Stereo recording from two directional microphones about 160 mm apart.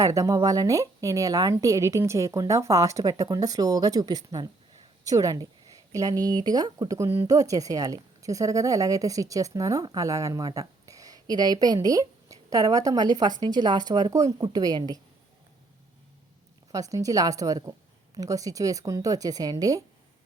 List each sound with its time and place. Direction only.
0.0 s a woman's voice: 20° right (ahead or behind)
16.7 s a woman's voice: 20° right (ahead or behind)